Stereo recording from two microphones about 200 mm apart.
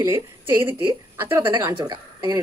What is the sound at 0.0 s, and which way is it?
Speech, 15° right (ahead or behind).